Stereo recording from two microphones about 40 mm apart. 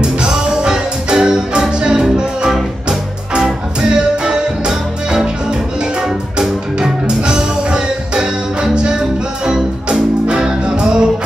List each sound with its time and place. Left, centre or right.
0.0 s music: centre